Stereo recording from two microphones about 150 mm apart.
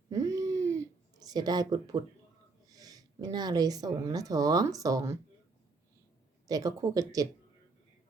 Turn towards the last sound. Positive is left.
turn(degrees=-25)  # may be behind; listen again after turning